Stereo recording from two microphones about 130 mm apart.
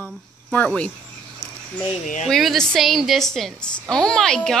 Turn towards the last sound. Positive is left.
turn(degrees=5)  # may be behind; listen again after turning